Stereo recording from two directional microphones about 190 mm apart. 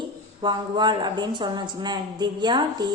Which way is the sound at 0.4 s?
25° right (ahead or behind).